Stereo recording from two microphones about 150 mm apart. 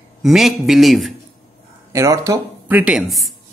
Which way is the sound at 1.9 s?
20° right (ahead or behind).